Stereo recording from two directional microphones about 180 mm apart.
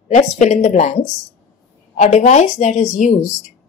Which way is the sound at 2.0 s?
40° left (ahead or behind).